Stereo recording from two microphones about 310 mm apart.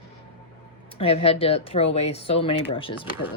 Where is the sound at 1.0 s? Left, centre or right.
Centre.